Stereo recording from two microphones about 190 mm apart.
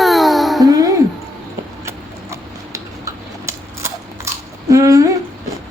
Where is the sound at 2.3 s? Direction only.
15° right (ahead or behind).